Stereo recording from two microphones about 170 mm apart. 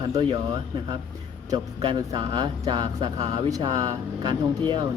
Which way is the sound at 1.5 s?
25° right (ahead or behind).